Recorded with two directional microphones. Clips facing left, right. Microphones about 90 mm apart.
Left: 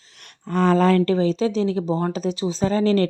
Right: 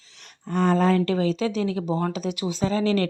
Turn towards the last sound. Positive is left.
turn(degrees=40)  # may be behind; listen again after turning